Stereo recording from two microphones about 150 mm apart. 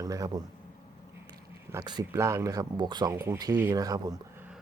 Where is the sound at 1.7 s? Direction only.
25° right (ahead or behind).